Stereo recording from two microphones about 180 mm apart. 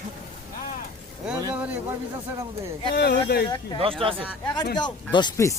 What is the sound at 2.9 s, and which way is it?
Speech, 65° left (ahead or behind).